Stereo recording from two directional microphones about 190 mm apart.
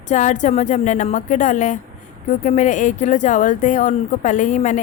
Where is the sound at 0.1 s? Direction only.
40° left (ahead or behind).